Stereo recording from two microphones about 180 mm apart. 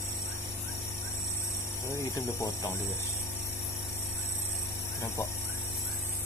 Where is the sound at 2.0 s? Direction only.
15° left (ahead or behind).